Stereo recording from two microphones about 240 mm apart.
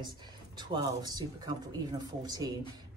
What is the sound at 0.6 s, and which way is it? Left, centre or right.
Speech, centre.